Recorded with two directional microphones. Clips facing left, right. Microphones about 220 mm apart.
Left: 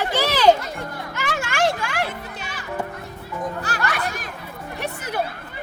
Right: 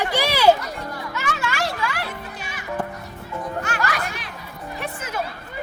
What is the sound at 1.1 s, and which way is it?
Music, 50° left (ahead or behind).